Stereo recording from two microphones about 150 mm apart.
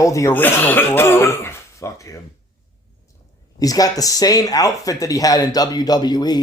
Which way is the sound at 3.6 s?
25° left (ahead or behind).